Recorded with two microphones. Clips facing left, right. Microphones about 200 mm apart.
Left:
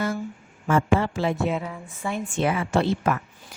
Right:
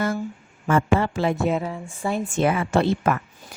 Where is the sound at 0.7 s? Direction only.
60° right (ahead or behind).